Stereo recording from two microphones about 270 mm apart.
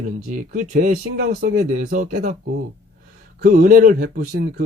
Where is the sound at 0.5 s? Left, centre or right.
Right.